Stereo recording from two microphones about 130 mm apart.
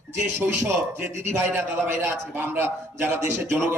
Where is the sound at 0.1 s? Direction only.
20° right (ahead or behind).